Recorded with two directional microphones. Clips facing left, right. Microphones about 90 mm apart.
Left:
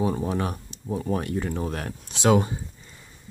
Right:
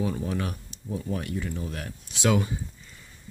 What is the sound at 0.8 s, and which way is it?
Speech, 45° left (ahead or behind).